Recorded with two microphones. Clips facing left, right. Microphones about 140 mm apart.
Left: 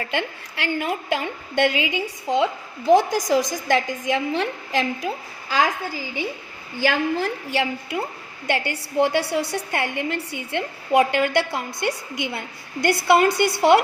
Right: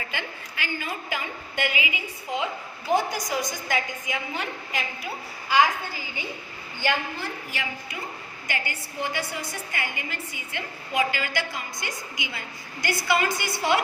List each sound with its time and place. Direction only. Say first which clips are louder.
0.1 s a woman's voice: left 8 dB; 75° left (ahead or behind); by 4.9 s 90° left
6.7 s a woman's voice: left 7 dB; 90° left; by 13.8 s 60° left (ahead or behind)